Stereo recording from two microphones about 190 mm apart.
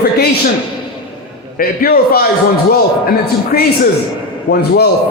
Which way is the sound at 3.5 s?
50° left (ahead or behind).